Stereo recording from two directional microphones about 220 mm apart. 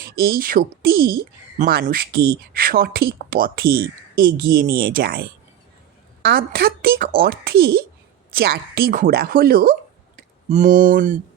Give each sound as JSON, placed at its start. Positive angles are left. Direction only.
{"t": 0.2, "sound": "speech", "side_deg": -40}